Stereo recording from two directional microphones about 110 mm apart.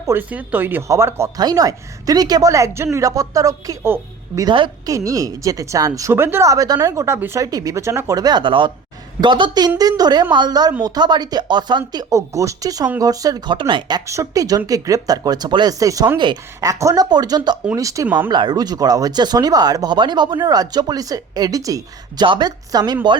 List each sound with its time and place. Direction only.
0.1 s speech: 15° right (ahead or behind)
1.4 s a woman's voice: 35° right (ahead or behind)
4.4 s a woman's voice: 50° right (ahead or behind)
4.9 s a woman's voice: 30° right (ahead or behind)
14.1 s a woman's voice: 30° right (ahead or behind)
16.1 s a woman's voice: 45° right (ahead or behind)
16.6 s a woman's voice: 30° right (ahead or behind)
18.3 s a woman's voice: 40° right (ahead or behind)